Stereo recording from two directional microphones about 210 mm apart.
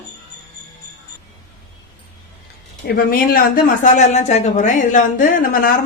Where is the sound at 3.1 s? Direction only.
45° left (ahead or behind).